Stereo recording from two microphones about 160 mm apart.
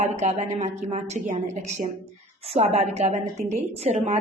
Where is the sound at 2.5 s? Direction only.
40° right (ahead or behind).